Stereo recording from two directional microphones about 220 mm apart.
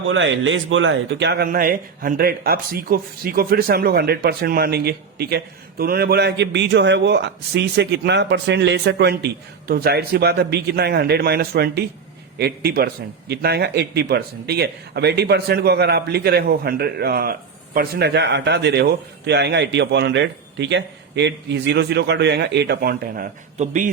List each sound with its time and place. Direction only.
0.1 s speech: 60° right (ahead or behind); by 23.9 s 35° right (ahead or behind)